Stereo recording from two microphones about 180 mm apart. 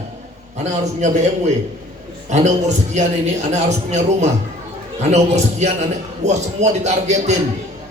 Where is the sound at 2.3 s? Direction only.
40° right (ahead or behind).